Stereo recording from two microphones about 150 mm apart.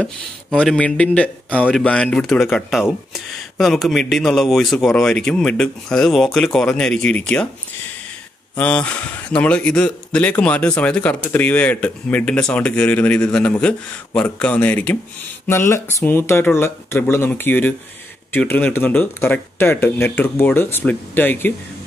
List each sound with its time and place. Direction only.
0.0 s speech: 5° left (ahead or behind)
8.5 s speech: 10° left (ahead or behind)